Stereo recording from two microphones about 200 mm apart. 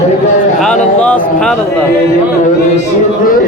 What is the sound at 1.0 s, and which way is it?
Speech, 5° left (ahead or behind).